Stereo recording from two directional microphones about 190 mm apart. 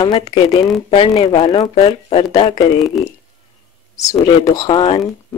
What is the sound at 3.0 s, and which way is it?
Speech, centre (ahead or behind).